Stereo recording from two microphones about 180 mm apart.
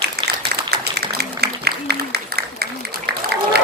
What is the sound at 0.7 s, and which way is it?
Applause, 65° right (ahead or behind).